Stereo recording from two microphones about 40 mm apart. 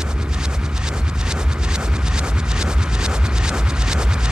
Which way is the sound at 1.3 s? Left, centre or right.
Centre.